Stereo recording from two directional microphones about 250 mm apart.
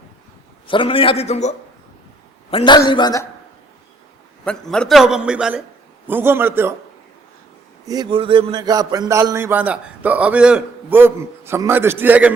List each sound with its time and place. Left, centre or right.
0.7 s a man's voice: left
4.4 s a man's voice: centre
7.9 s a man's voice: centre